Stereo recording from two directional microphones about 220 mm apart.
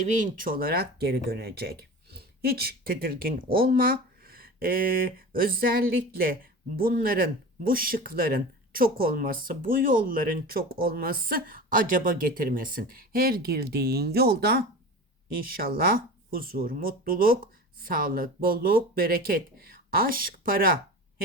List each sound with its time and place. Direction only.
0.0 s speech: 35° right (ahead or behind)